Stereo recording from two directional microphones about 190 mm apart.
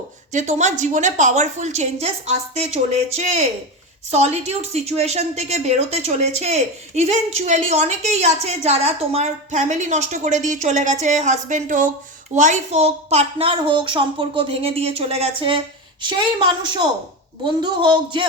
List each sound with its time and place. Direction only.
0.3 s a woman's voice: 40° right (ahead or behind)
17.4 s speech: 25° right (ahead or behind)